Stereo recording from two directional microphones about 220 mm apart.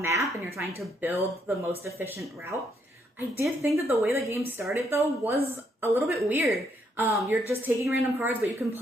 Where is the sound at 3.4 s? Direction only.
15° right (ahead or behind).